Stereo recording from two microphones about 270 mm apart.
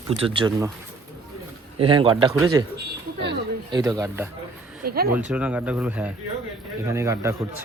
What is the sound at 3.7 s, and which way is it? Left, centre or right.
Speech, centre.